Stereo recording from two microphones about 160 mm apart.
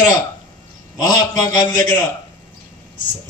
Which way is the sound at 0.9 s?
25° left (ahead or behind).